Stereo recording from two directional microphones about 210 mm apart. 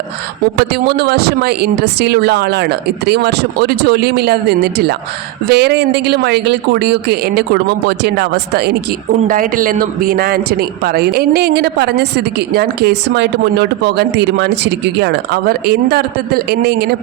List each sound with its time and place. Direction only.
0.7 s a man's voice: 50° right (ahead or behind)